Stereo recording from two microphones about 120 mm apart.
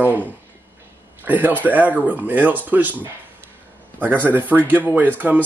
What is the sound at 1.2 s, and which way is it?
Speech, 15° right (ahead or behind).